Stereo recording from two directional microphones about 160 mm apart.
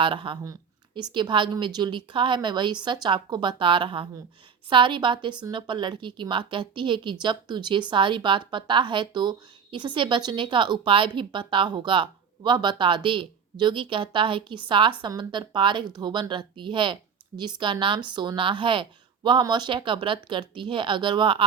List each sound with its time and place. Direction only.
0.0 s a woman's voice: 30° right (ahead or behind)